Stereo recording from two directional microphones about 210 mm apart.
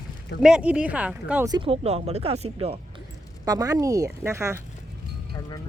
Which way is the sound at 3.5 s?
15° right (ahead or behind).